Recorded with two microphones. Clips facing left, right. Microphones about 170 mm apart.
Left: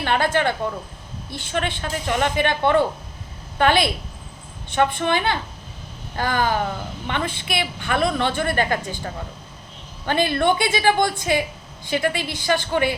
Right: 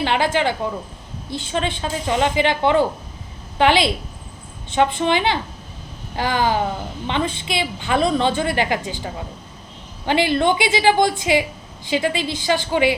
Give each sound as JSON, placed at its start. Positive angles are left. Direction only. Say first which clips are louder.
{"t": 0.0, "sound": "a woman's voice", "louder": "right 1 dB", "side_deg": -20}
{"t": 1.5, "sound": "a woman's voice", "louder": "right 2 dB", "side_deg": -20}